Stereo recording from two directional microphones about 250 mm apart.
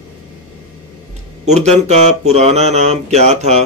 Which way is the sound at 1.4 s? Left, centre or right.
Right.